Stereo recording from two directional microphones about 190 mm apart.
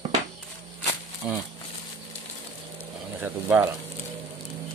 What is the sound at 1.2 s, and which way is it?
Speech, 5° right (ahead or behind).